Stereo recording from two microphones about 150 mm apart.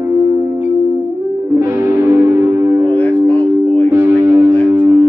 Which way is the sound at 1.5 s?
15° right (ahead or behind).